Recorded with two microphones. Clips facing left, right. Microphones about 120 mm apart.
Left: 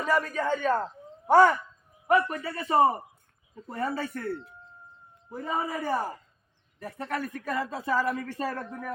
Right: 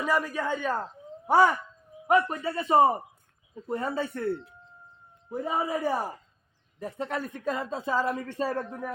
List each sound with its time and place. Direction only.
0.0 s a man's voice: 10° right (ahead or behind)
2.0 s speech: 20° right (ahead or behind)
5.4 s a man's voice: 10° right (ahead or behind)
6.7 s speech: 20° right (ahead or behind)